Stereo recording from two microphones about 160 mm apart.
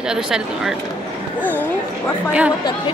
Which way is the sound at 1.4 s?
10° left (ahead or behind).